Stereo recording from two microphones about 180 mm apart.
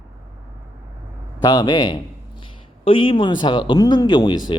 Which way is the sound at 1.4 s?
20° left (ahead or behind).